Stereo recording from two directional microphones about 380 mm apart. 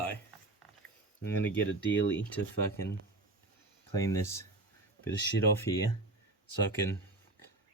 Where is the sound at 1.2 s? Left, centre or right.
Centre.